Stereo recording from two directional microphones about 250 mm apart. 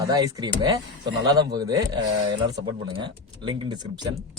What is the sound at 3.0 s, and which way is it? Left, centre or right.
Speech, centre.